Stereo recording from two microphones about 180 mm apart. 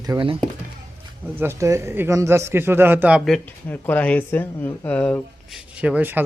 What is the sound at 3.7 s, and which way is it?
Speech, 10° left (ahead or behind).